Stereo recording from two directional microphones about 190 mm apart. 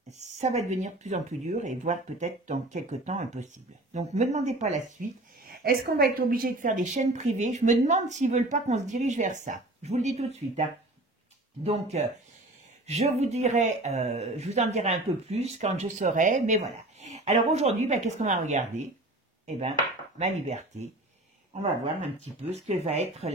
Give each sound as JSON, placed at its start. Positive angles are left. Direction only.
{"t": 0.2, "sound": "speech", "side_deg": -35}
{"t": 5.6, "sound": "speech", "side_deg": -55}
{"t": 11.6, "sound": "speech", "side_deg": -35}
{"t": 22.2, "sound": "speech", "side_deg": -35}